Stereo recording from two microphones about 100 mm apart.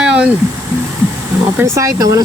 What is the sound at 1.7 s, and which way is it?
Speech, 35° right (ahead or behind).